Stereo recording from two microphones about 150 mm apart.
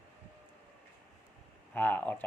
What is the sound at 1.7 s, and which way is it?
Speech, 15° left (ahead or behind).